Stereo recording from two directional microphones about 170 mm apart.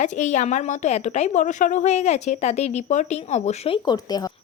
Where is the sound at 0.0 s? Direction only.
45° left (ahead or behind).